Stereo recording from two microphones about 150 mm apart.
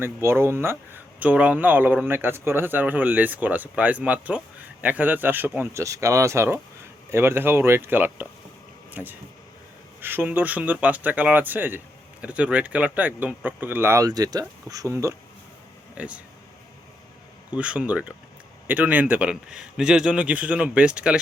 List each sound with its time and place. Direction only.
0.0 s speech: 15° right (ahead or behind)
16.0 s speech: 10° right (ahead or behind)
17.5 s speech: 10° right (ahead or behind)